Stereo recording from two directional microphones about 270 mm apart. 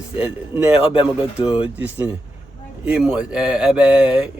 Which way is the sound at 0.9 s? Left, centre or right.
Centre.